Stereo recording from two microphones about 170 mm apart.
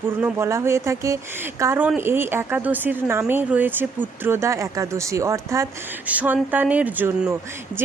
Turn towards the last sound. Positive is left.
turn(degrees=-15)  # may be behind; listen again after turning